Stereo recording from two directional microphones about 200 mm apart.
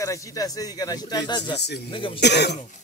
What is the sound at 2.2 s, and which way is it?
Speech, 55° left (ahead or behind).